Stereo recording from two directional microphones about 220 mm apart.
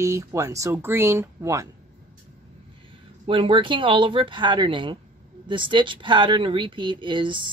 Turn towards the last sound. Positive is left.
turn(degrees=-20)  # may be behind; listen again after turning